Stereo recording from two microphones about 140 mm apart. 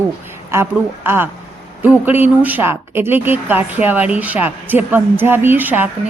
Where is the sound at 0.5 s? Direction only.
15° right (ahead or behind).